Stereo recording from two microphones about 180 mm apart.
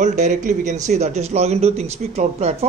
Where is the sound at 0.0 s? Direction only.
40° right (ahead or behind).